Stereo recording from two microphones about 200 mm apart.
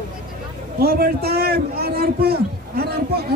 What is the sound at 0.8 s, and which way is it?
A man's voice, 50° right (ahead or behind).